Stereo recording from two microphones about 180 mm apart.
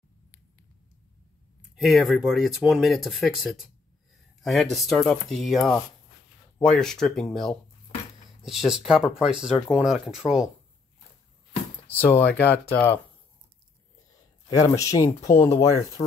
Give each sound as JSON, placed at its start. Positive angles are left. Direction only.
{"t": 1.8, "sound": "speech", "side_deg": 0}
{"t": 12.0, "sound": "speech", "side_deg": 10}
{"t": 14.5, "sound": "speech", "side_deg": 20}